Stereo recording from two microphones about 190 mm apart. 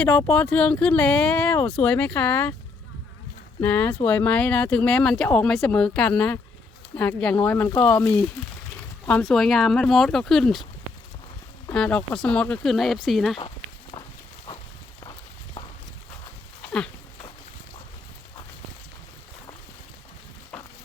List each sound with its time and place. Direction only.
0.0 s speech: 10° left (ahead or behind)
3.6 s speech: 10° left (ahead or behind)
11.7 s speech: 5° left (ahead or behind)